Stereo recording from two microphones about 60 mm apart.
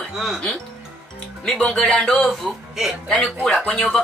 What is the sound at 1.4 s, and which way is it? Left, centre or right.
Speech, centre.